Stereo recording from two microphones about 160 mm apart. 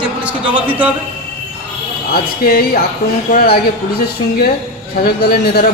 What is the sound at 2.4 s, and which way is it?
A man's voice, 70° left (ahead or behind).